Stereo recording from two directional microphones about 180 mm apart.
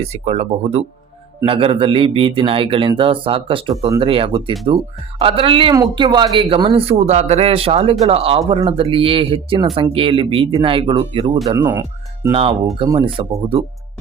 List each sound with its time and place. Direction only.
0.0 s a man's voice: 35° right (ahead or behind)
11.5 s speech: 15° right (ahead or behind)
12.3 s a man's voice: 30° right (ahead or behind)